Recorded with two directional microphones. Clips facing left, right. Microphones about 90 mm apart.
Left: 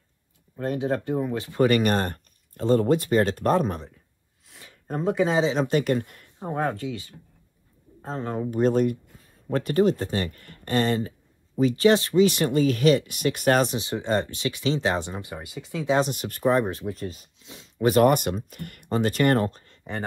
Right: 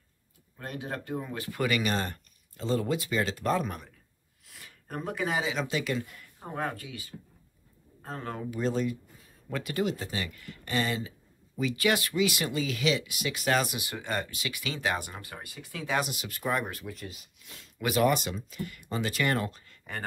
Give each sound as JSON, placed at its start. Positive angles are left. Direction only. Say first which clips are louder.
{"t": 0.6, "sound": "speech", "louder": "left 11 dB", "side_deg": 20}
{"t": 1.6, "sound": "speech", "louder": "left 8 dB", "side_deg": 50}
{"t": 4.5, "sound": "speech", "louder": "left 8 dB", "side_deg": 20}
{"t": 5.6, "sound": "speech", "louder": "left 8 dB", "side_deg": 50}
{"t": 6.2, "sound": "speech", "louder": "left 7 dB", "side_deg": 20}
{"t": 8.5, "sound": "speech", "louder": "left 8 dB", "side_deg": 50}
{"t": 9.5, "sound": "speech", "louder": "left 9 dB", "side_deg": 40}
{"t": 16.0, "sound": "speech", "louder": "left 8 dB", "side_deg": 45}
{"t": 16.4, "sound": "speech", "louder": "left 9 dB", "side_deg": 25}
{"t": 17.4, "sound": "a sound", "louder": "left 10 dB", "side_deg": 20}
{"t": 17.8, "sound": "speech", "louder": "left 7 dB", "side_deg": 50}